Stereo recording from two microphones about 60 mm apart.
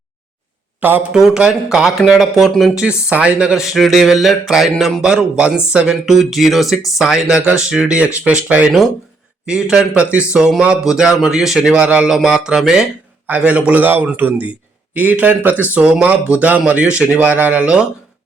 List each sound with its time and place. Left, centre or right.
0.8 s speech: right
1.1 s speech: centre
2.0 s speech: centre
2.7 s speech: centre
6.1 s speech: centre
11.7 s speech: centre
13.2 s a man's voice: right
15.7 s speech: centre